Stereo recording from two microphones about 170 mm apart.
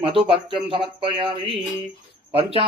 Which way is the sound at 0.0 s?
30° right (ahead or behind).